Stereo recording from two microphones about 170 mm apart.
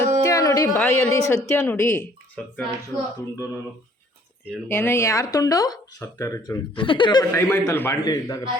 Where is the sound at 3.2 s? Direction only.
15° left (ahead or behind).